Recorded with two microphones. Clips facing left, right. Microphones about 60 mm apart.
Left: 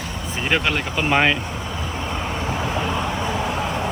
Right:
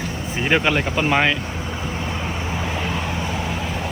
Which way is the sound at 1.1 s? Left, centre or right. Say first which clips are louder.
Left 2 dB; centre.